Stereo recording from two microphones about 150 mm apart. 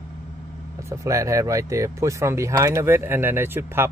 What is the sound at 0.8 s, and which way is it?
Speech, 20° right (ahead or behind).